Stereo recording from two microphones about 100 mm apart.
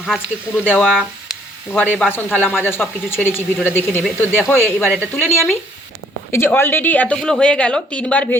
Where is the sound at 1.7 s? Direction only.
15° left (ahead or behind).